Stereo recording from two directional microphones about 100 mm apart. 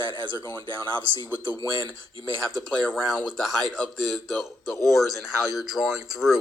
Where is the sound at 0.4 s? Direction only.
35° left (ahead or behind).